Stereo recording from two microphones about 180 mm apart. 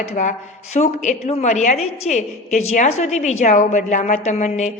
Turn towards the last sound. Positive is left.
turn(degrees=40)  # may be behind; listen again after turning